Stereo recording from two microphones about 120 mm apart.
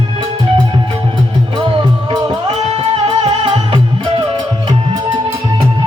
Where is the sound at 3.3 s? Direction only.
45° right (ahead or behind).